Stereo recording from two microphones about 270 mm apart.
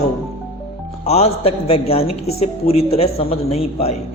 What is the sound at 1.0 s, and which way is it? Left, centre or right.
A man's voice, left.